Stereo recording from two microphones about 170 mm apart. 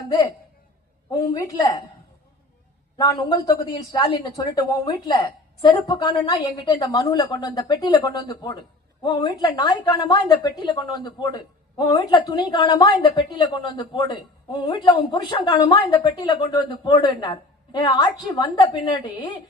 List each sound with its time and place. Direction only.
1.1 s a woman's voice: 20° left (ahead or behind)
3.0 s a woman's voice: 25° left (ahead or behind)